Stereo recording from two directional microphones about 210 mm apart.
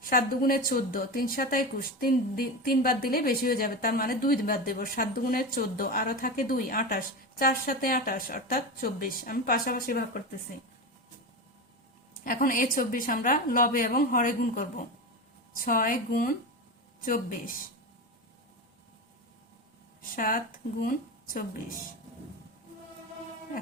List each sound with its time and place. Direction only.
0.0 s speech: 45° left (ahead or behind)
12.2 s a woman's voice: 40° left (ahead or behind)
20.0 s a woman's voice: 40° left (ahead or behind)